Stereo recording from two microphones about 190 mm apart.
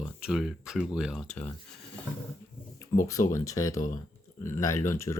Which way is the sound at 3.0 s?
15° left (ahead or behind).